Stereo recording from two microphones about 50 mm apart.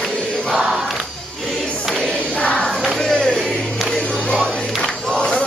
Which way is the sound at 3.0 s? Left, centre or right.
Centre.